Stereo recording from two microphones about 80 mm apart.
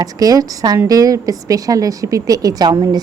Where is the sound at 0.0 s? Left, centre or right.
Right.